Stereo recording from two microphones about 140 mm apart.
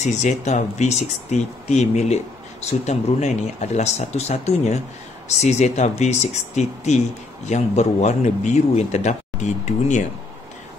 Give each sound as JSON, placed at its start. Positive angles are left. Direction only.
{"t": 0.0, "sound": "speech", "side_deg": 55}